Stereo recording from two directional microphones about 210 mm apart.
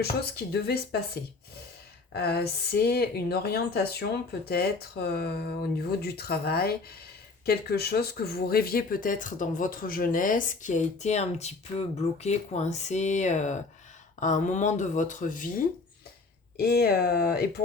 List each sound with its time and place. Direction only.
0.0 s speech: 50° left (ahead or behind)
2.1 s speech: 50° left (ahead or behind)